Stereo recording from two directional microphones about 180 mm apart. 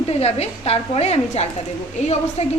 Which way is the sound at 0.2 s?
35° left (ahead or behind).